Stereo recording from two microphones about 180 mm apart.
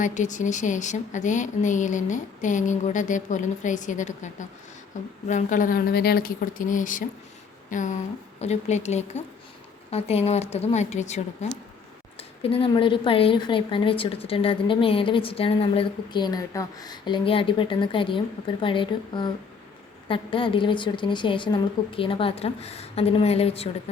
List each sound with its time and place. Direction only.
0.0 s a woman's voice: 45° left (ahead or behind)